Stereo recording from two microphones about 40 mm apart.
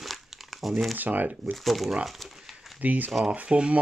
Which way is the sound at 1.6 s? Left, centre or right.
Centre.